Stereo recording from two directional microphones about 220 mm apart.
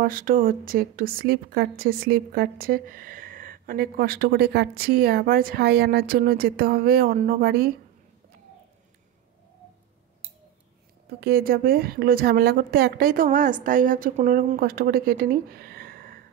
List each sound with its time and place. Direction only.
0.0 s a woman's voice: 40° right (ahead or behind)
11.1 s a woman's voice: 45° right (ahead or behind)